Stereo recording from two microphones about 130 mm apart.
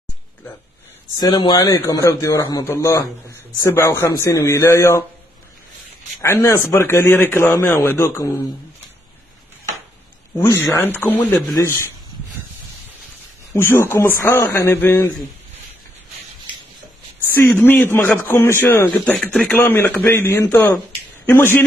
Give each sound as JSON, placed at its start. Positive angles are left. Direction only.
{"t": 1.1, "sound": "a man's voice", "side_deg": 35}
{"t": 6.2, "sound": "a man's voice", "side_deg": 20}
{"t": 10.3, "sound": "a man's voice", "side_deg": 20}
{"t": 13.5, "sound": "a man's voice", "side_deg": 20}
{"t": 17.4, "sound": "a man's voice", "side_deg": 15}